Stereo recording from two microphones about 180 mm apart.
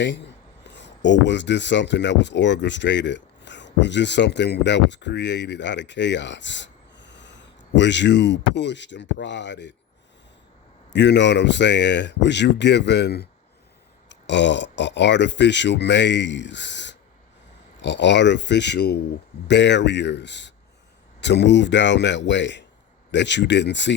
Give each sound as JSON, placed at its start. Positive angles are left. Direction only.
{"t": 0.0, "sound": "speech", "side_deg": 75}
{"t": 10.9, "sound": "speech", "side_deg": 75}
{"t": 14.1, "sound": "speech", "side_deg": 80}